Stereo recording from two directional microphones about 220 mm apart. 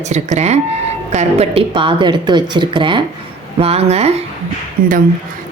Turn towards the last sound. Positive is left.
turn(degrees=-40)  # may be behind; listen again after turning